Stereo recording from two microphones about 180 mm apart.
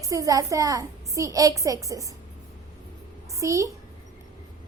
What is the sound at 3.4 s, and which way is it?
Speech, 15° right (ahead or behind).